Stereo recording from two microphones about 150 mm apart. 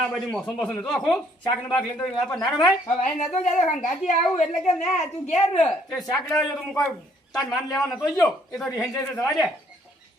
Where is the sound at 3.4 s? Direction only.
55° left (ahead or behind).